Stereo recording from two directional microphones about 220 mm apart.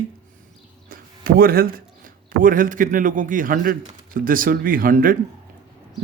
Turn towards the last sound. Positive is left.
turn(degrees=-40)  # may be behind; listen again after turning